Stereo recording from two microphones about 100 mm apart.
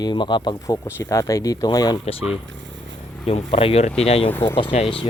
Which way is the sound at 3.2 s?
85° left.